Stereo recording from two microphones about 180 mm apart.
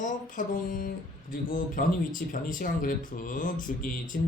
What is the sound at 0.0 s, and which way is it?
Speech, 45° left (ahead or behind).